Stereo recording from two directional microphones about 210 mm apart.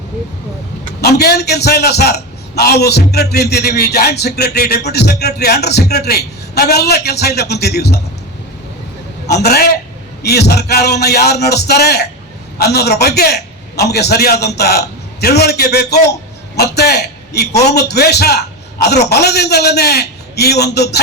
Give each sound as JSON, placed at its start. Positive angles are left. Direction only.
{"t": 1.0, "sound": "a man's voice", "side_deg": 50}
{"t": 9.4, "sound": "a man's voice", "side_deg": 50}